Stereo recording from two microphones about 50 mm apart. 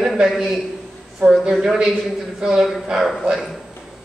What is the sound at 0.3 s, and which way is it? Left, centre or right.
A man's voice, centre.